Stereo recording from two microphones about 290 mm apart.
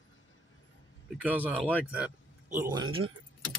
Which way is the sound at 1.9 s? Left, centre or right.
Centre.